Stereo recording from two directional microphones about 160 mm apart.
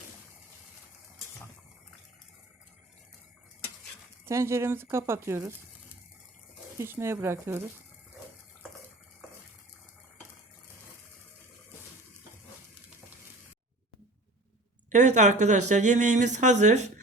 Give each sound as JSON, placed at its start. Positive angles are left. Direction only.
{"t": 4.3, "sound": "speech", "side_deg": -15}
{"t": 6.7, "sound": "speech", "side_deg": -15}
{"t": 14.8, "sound": "speech", "side_deg": -50}